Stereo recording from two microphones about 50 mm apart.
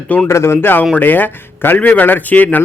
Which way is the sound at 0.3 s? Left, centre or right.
Left.